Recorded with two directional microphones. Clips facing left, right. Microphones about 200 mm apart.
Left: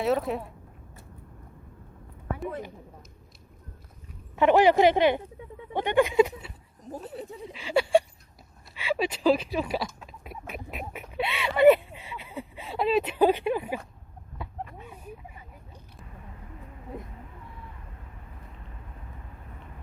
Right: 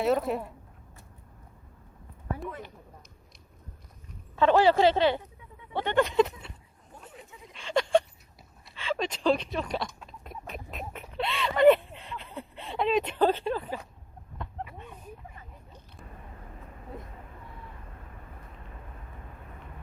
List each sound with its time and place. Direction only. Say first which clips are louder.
0.0 s speech: even; centre (ahead or behind)
4.4 s speech: left 2 dB; 15° left (ahead or behind)
6.9 s speech: left 11 dB; 35° left (ahead or behind)
7.5 s a sound: left 2 dB; 5° left (ahead or behind)